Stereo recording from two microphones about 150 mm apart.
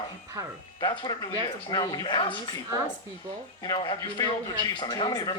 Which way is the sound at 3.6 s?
30° left (ahead or behind).